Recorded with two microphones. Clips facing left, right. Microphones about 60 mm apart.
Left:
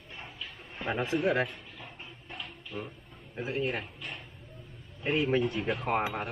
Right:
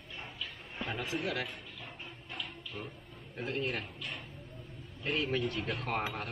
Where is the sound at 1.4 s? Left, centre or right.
Centre.